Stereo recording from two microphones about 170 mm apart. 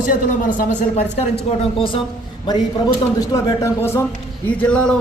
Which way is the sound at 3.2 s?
20° left (ahead or behind).